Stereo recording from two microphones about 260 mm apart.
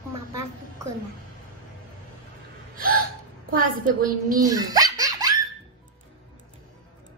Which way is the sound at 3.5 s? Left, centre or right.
Right.